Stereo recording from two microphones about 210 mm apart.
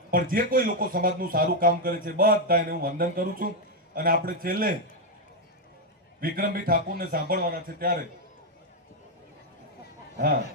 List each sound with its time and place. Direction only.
0.1 s a man's voice: 45° right (ahead or behind)
6.1 s a man's voice: 45° right (ahead or behind)
10.2 s a man's voice: 45° right (ahead or behind)